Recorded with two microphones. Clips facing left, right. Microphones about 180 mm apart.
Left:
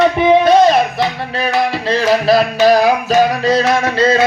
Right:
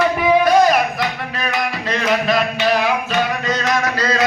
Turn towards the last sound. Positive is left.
turn(degrees=25)  # may be behind; listen again after turning